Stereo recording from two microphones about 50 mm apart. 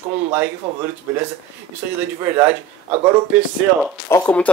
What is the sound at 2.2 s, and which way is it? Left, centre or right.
Speech, right.